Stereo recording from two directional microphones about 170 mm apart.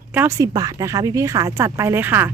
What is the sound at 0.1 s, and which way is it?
Speech, 15° right (ahead or behind).